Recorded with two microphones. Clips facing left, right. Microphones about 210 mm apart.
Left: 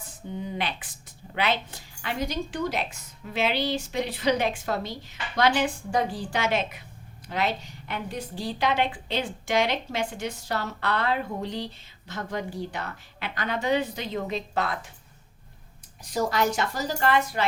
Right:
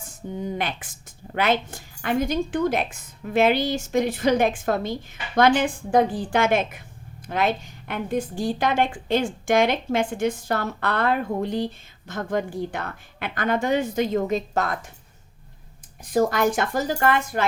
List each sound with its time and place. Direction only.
0.3 s a woman's voice: 45° right (ahead or behind)
16.0 s a woman's voice: 50° right (ahead or behind)